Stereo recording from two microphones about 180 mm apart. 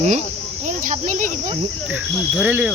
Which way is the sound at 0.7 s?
45° right (ahead or behind).